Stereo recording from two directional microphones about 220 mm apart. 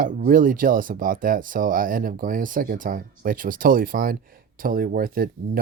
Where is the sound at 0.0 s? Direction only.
40° right (ahead or behind).